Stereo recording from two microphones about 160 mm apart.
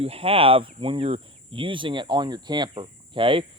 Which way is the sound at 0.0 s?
35° right (ahead or behind).